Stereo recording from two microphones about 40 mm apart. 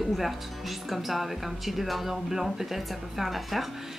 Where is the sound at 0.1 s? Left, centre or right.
Centre.